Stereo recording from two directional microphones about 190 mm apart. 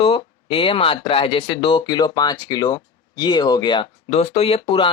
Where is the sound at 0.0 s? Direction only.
30° left (ahead or behind).